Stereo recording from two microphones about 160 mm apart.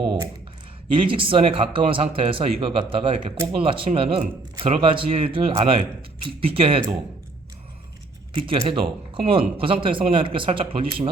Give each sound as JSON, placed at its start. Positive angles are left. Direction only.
{"t": 0.0, "sound": "speech", "side_deg": -30}
{"t": 8.3, "sound": "speech", "side_deg": -35}